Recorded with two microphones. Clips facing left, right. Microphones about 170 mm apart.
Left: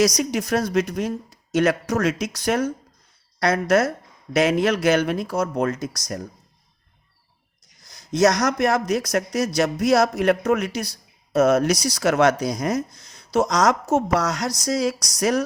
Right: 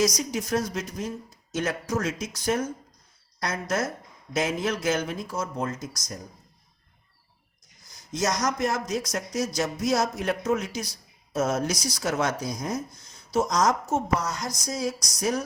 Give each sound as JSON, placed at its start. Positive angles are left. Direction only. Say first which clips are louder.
{"t": 0.0, "sound": "a man's voice", "louder": "left 5 dB", "side_deg": 70}
{"t": 7.9, "sound": "a man's voice", "louder": "left 10 dB", "side_deg": 70}